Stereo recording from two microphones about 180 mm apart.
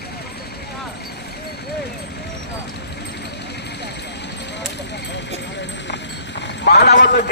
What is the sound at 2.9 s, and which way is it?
Vehicle, 70° left (ahead or behind).